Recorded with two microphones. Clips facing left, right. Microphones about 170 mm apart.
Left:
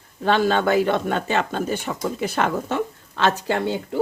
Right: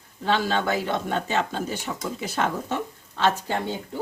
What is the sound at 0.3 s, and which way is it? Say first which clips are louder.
Speech: left 5 dB; 55° left (ahead or behind).